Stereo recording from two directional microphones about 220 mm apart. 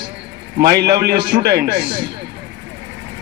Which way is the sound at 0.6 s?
45° right (ahead or behind).